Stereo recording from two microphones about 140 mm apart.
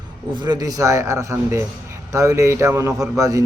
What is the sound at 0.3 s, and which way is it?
A man's voice, 30° right (ahead or behind).